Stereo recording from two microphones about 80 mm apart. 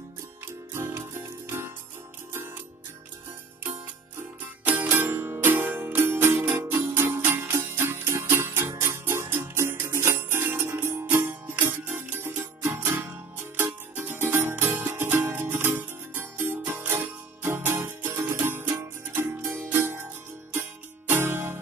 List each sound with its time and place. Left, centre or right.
0.8 s music: right
4.2 s music: right
21.1 s music: right